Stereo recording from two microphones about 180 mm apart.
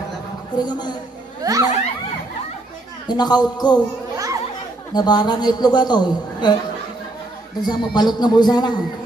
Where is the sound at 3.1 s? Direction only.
25° left (ahead or behind).